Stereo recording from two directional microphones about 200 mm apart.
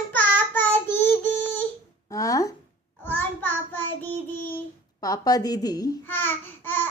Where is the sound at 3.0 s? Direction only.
10° left (ahead or behind).